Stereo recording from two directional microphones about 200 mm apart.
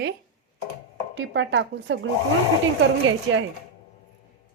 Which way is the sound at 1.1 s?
65° right (ahead or behind).